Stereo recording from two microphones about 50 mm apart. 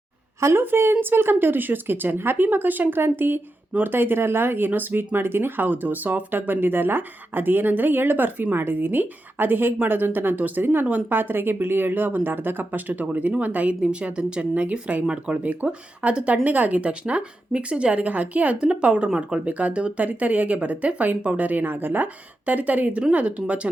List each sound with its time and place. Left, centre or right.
0.3 s a woman's voice: right
0.6 s speech: right